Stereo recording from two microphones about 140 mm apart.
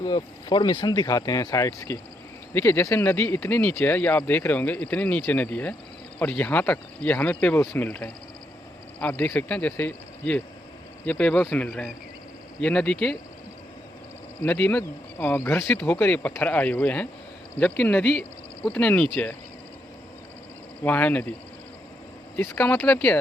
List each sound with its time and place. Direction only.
0.0 s speech: 30° left (ahead or behind)
7.9 s speech: 5° left (ahead or behind)
14.4 s speech: 10° left (ahead or behind)
20.8 s speech: 10° left (ahead or behind)
22.4 s speech: 10° left (ahead or behind)